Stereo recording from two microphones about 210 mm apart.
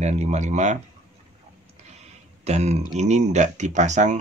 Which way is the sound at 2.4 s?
30° right (ahead or behind).